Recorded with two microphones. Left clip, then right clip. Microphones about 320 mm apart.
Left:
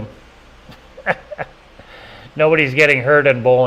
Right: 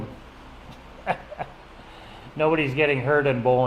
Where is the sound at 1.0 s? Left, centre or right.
Left.